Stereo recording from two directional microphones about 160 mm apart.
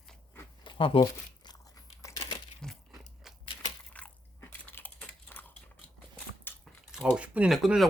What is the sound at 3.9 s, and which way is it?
Biting, 10° left (ahead or behind).